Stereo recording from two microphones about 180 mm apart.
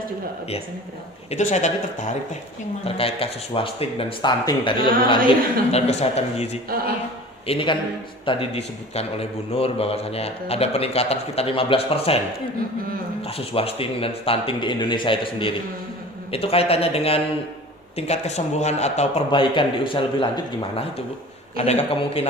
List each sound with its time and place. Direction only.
1.3 s a man's voice: 40° left (ahead or behind)
13.2 s a man's voice: 30° left (ahead or behind)
19.3 s a man's voice: 25° left (ahead or behind)